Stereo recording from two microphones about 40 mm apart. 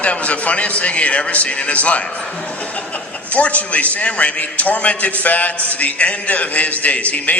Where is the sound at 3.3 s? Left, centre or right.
Left.